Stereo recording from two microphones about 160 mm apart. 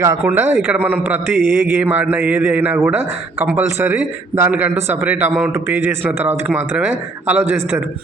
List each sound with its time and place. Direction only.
0.0 s a man's voice: 15° right (ahead or behind)